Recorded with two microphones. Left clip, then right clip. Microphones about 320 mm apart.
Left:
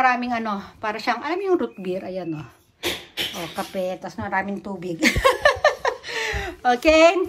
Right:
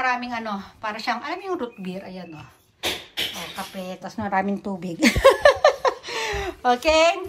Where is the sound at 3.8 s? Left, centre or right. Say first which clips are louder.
Left 3 dB; centre.